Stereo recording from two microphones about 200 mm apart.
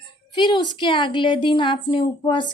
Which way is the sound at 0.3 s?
20° left (ahead or behind).